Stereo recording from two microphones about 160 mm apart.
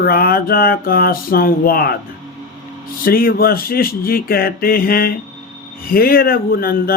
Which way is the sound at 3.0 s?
65° left (ahead or behind).